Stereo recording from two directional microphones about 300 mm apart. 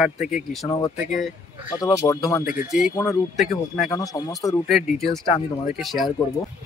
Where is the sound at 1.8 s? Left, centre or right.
Centre.